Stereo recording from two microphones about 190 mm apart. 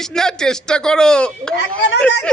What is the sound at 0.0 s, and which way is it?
Speech, 5° left (ahead or behind).